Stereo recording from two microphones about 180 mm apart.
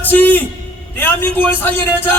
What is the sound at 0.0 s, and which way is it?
A man's voice, 10° left (ahead or behind).